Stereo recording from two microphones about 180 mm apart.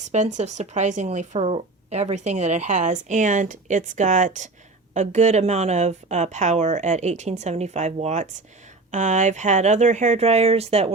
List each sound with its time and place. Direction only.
0.0 s speech: 40° right (ahead or behind)